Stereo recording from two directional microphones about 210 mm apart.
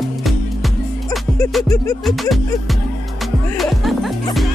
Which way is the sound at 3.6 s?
Centre (ahead or behind).